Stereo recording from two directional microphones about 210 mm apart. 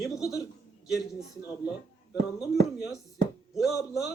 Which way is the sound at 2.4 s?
Centre (ahead or behind).